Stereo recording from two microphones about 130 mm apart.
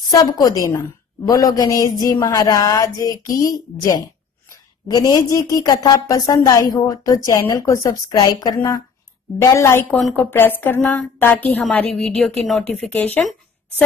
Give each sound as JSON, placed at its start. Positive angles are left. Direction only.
{"t": 0.1, "sound": "a woman's voice", "side_deg": 30}
{"t": 11.9, "sound": "a woman's voice", "side_deg": 0}
{"t": 12.9, "sound": "a woman's voice", "side_deg": 15}
{"t": 13.2, "sound": "a sound", "side_deg": 0}